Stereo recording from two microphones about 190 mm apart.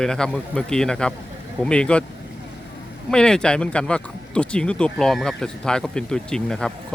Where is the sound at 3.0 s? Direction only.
5° left (ahead or behind).